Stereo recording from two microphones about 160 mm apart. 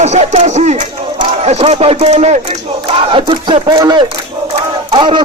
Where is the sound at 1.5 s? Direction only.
40° right (ahead or behind).